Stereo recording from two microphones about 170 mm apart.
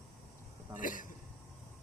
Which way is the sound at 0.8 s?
50° left (ahead or behind).